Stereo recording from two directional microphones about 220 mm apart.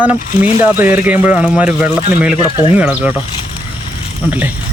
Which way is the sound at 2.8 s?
5° right (ahead or behind).